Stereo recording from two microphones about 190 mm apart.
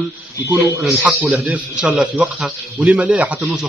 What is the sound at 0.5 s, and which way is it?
Speech, 15° right (ahead or behind).